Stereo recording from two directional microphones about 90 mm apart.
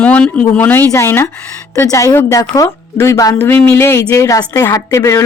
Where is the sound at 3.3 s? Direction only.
20° left (ahead or behind).